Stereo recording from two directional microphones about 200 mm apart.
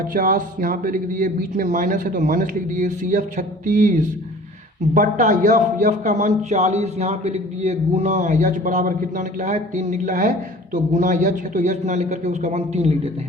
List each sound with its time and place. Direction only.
0.1 s a man's voice: 45° right (ahead or behind)